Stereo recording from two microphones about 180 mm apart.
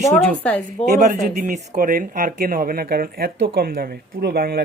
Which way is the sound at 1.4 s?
45° right (ahead or behind).